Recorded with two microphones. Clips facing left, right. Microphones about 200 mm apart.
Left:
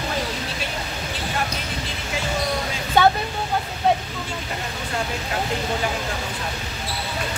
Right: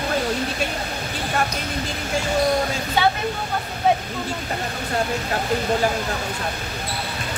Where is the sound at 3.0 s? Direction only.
50° left (ahead or behind).